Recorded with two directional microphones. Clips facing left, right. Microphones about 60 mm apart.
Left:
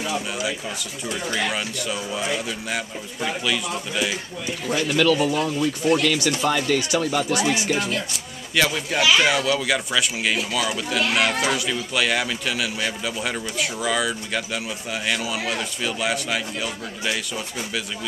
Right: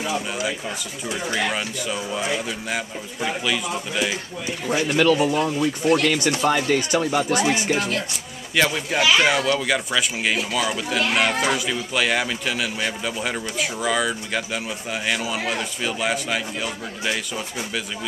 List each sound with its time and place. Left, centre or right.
0.0 s speech: centre
4.6 s speech: right
6.1 s speech: right
6.4 s speech: right
8.5 s speech: centre